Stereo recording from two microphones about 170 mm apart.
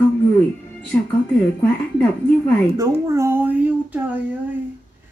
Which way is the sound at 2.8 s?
15° right (ahead or behind).